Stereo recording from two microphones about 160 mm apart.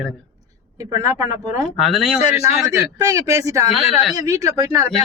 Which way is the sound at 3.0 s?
20° right (ahead or behind).